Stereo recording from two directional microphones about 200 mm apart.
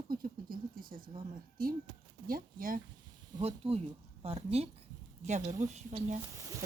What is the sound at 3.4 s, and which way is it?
Speech, 30° right (ahead or behind).